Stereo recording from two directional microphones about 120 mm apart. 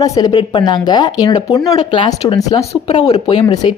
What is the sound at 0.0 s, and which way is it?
A woman's voice, 30° left (ahead or behind).